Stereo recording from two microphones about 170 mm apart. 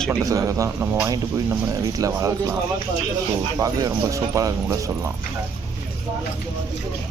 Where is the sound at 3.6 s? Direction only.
20° right (ahead or behind).